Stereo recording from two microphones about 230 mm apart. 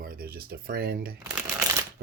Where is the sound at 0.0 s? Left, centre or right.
Right.